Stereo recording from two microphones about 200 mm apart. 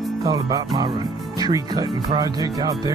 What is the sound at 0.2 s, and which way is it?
Speech, 20° right (ahead or behind).